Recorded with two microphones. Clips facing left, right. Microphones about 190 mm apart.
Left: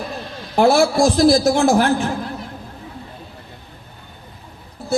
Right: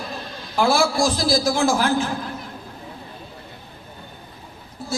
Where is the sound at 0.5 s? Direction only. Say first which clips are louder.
Left 5 dB; 60° left (ahead or behind).